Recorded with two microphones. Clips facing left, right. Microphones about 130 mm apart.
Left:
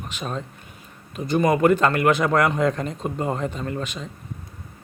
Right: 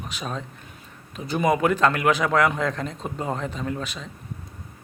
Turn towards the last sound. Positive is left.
turn(degrees=0)  # may be behind; listen again after turning